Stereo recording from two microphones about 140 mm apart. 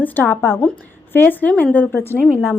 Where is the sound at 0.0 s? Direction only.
15° left (ahead or behind).